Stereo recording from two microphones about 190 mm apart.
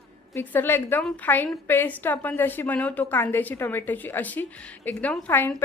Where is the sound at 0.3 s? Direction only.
10° left (ahead or behind).